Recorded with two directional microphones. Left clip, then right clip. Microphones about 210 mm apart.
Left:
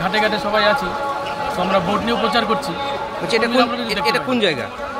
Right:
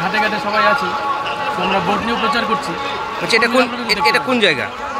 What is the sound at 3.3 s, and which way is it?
A man's voice, centre (ahead or behind).